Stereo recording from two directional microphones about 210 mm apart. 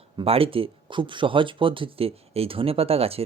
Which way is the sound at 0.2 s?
25° right (ahead or behind).